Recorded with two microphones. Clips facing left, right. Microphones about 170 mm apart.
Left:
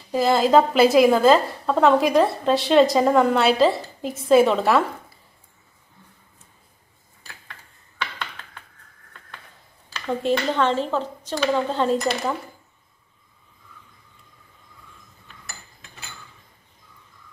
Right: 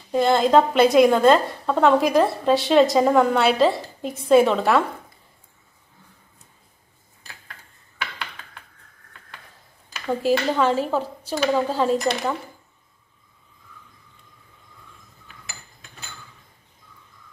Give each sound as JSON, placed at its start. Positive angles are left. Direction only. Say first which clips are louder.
{"t": 0.1, "sound": "a woman's voice", "louder": "even", "side_deg": 0}
{"t": 9.9, "sound": "a woman's voice", "louder": "right 2 dB", "side_deg": -5}